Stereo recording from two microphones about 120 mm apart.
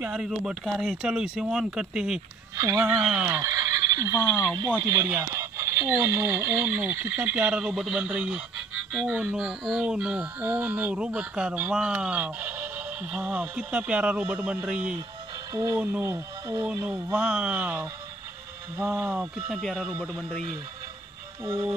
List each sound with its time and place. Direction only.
0.1 s speech: 5° right (ahead or behind)
2.5 s speech: 30° right (ahead or behind)
3.3 s gobble: 25° right (ahead or behind)
4.8 s speech: 30° right (ahead or behind); by 8.4 s 5° right (ahead or behind)
8.9 s speech: 20° right (ahead or behind)
15.5 s speech: 30° right (ahead or behind)
17.1 s speech: 10° right (ahead or behind)
19.6 s speech: 10° left (ahead or behind)
21.5 s speech: 25° right (ahead or behind)